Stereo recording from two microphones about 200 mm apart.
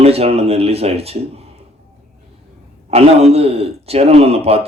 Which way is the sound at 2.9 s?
30° right (ahead or behind).